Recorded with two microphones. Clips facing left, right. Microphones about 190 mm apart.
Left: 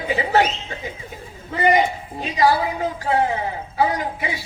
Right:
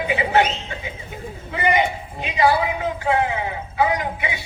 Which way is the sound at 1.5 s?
35° left (ahead or behind).